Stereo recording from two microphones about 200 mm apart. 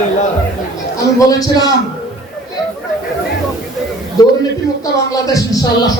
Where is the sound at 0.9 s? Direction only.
15° left (ahead or behind).